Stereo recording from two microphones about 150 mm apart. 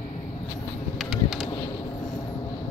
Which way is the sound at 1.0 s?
Centre (ahead or behind).